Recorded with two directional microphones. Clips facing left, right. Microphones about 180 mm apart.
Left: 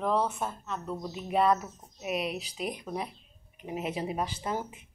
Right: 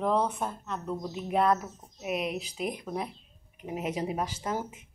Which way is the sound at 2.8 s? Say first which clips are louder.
Right 1 dB; 10° left (ahead or behind).